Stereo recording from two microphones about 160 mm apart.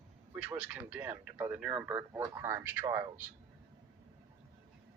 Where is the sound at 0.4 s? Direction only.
10° right (ahead or behind).